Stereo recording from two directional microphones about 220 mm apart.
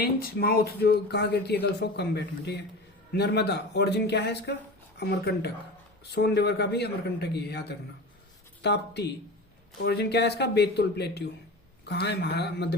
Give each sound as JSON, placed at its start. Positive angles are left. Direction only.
{"t": 0.0, "sound": "a man's voice", "side_deg": 45}